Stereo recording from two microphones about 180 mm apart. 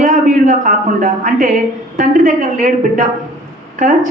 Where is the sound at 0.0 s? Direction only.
45° right (ahead or behind).